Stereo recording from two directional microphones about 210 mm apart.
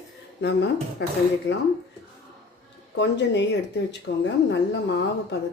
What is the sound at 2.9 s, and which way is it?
A woman's voice, 55° left (ahead or behind).